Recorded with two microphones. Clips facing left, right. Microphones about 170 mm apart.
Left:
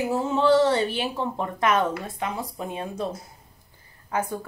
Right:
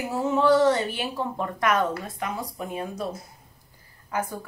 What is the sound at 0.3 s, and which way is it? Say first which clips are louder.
A woman's voice: right 1 dB; 25° left (ahead or behind).